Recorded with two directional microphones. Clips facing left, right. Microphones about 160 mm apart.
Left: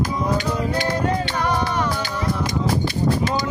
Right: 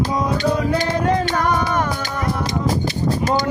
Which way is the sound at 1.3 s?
50° right (ahead or behind).